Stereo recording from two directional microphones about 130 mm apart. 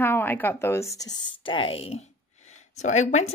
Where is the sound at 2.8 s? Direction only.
65° left (ahead or behind).